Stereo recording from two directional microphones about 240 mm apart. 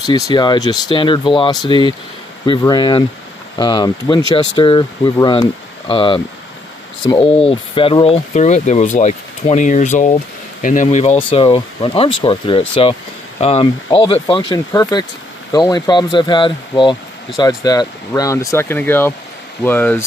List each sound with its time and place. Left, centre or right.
0.3 s speech: centre